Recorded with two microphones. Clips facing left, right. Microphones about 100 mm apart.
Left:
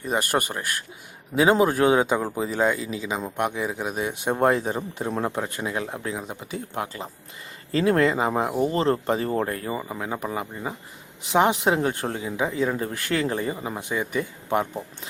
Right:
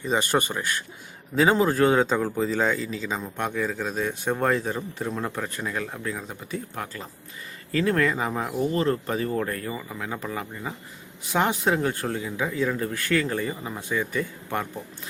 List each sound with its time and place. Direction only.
0.0 s speech: 10° left (ahead or behind)